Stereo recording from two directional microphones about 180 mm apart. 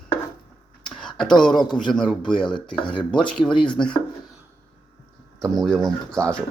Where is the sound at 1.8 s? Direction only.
5° left (ahead or behind).